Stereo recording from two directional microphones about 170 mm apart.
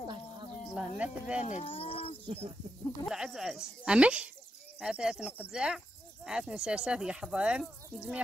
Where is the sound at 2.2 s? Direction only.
40° right (ahead or behind).